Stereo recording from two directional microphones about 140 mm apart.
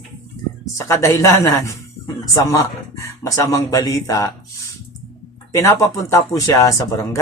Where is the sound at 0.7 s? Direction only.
20° left (ahead or behind).